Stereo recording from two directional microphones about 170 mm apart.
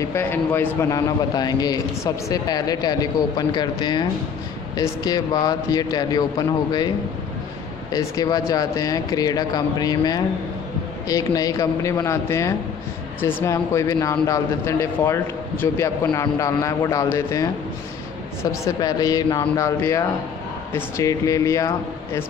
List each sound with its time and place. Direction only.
0.1 s a man's voice: 15° left (ahead or behind)
7.9 s a man's voice: 25° left (ahead or behind)